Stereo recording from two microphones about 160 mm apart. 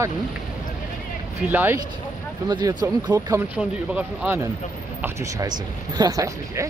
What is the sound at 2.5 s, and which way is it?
Speech, 25° right (ahead or behind).